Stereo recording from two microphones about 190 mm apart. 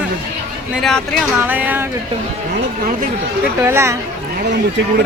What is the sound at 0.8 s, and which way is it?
Speech, 5° left (ahead or behind).